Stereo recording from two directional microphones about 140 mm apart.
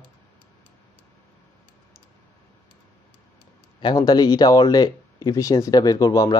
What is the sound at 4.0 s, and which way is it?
Speech, 25° left (ahead or behind).